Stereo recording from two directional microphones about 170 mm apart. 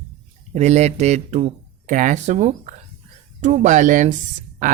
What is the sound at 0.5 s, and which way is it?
Speech, 40° right (ahead or behind).